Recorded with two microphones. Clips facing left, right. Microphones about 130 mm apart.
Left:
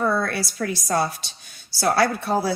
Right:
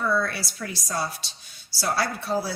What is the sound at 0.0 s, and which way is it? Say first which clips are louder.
A woman's voice: left 3 dB; 45° left (ahead or behind).